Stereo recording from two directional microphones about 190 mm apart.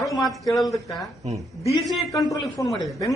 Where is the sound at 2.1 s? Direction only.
15° left (ahead or behind).